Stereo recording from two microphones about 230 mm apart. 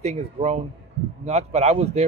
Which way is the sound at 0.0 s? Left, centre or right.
Right.